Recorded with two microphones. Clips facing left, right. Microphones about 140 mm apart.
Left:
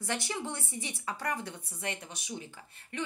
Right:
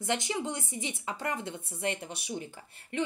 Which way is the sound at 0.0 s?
20° right (ahead or behind).